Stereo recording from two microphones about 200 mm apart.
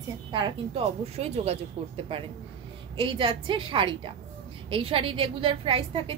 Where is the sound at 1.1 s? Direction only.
30° right (ahead or behind).